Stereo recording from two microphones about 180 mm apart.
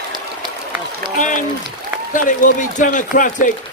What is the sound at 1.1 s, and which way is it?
A man's voice, 45° left (ahead or behind).